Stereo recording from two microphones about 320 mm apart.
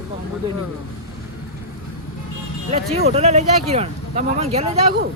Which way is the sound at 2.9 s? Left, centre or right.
Centre.